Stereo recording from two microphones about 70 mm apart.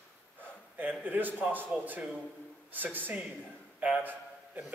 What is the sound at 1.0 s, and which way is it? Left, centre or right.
A man's voice, right.